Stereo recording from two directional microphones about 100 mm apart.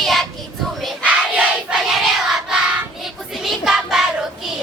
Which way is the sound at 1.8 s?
5° right (ahead or behind).